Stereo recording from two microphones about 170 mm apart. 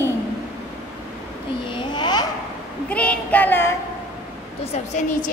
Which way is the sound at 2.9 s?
5° left (ahead or behind).